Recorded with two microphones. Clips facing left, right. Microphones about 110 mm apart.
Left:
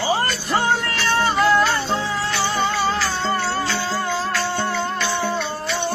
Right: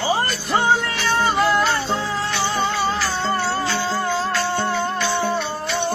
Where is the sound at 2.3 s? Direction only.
20° right (ahead or behind).